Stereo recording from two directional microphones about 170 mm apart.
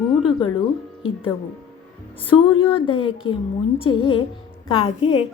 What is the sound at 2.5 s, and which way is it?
A woman's voice, 30° left (ahead or behind).